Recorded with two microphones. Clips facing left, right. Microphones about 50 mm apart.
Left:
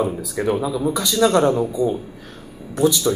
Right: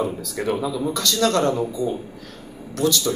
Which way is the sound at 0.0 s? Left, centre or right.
Centre.